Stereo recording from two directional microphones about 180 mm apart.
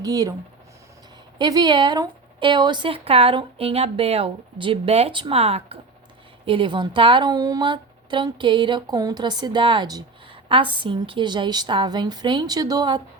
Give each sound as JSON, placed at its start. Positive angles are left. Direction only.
{"t": 0.0, "sound": "a woman's voice", "side_deg": -20}
{"t": 1.4, "sound": "a woman's voice", "side_deg": -25}